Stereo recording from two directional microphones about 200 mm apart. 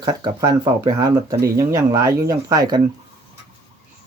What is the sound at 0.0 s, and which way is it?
Speech, 20° right (ahead or behind).